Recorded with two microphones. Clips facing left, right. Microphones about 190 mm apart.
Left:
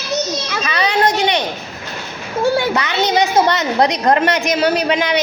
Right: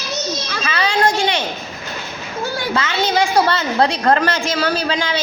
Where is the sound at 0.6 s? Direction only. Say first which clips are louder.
Left 1 dB; 20° left (ahead or behind).